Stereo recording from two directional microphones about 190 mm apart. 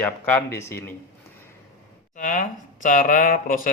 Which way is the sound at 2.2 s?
40° left (ahead or behind).